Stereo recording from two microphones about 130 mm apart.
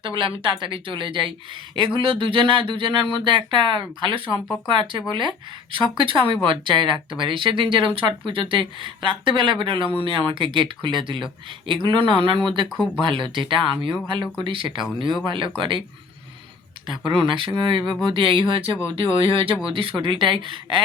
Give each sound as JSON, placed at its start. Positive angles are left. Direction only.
{"t": 0.0, "sound": "speech", "side_deg": -40}
{"t": 17.2, "sound": "speech", "side_deg": -40}